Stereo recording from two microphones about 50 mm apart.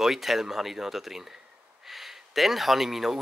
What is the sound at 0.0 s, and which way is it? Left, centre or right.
Speech, centre.